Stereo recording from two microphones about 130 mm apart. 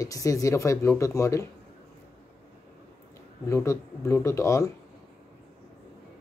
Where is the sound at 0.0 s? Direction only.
25° left (ahead or behind).